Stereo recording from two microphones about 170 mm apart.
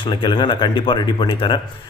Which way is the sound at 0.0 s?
30° left (ahead or behind).